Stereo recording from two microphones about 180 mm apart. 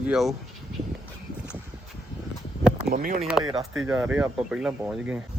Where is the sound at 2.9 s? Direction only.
50° right (ahead or behind).